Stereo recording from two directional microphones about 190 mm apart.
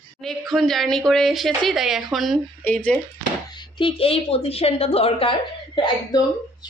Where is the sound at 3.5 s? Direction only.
25° left (ahead or behind).